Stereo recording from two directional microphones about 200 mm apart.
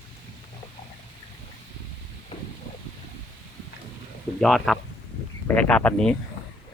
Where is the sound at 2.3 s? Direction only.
30° left (ahead or behind).